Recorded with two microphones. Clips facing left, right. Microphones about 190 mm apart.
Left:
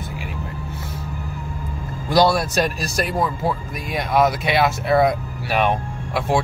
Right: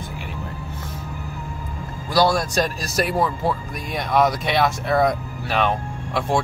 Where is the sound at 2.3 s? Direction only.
5° left (ahead or behind).